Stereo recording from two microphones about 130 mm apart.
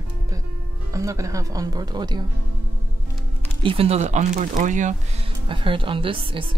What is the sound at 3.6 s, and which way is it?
Speech, 45° right (ahead or behind).